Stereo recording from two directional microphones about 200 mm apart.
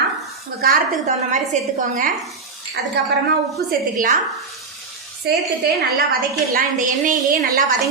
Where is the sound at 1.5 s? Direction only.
35° right (ahead or behind).